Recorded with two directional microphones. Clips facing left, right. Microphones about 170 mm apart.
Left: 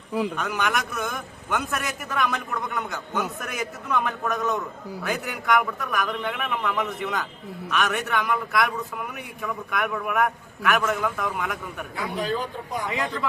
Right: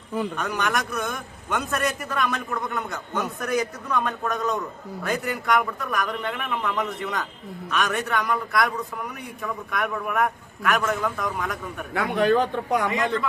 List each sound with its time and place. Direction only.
0.1 s a man's voice: 10° left (ahead or behind)
11.9 s speech: 70° right (ahead or behind)